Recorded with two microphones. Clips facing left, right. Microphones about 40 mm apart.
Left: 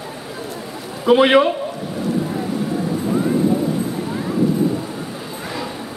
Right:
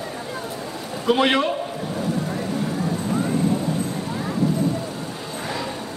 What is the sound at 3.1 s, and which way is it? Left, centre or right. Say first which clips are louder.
Vehicle: left 5 dB; centre.